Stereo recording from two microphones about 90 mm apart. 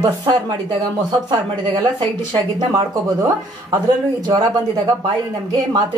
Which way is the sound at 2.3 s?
40° right (ahead or behind).